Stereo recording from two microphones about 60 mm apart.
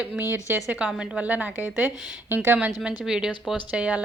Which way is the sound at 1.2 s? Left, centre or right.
Right.